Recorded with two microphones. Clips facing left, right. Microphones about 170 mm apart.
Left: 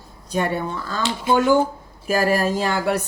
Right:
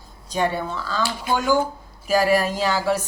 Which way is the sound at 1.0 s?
25° left (ahead or behind).